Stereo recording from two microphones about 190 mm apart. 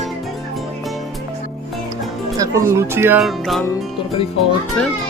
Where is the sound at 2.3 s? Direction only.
15° right (ahead or behind).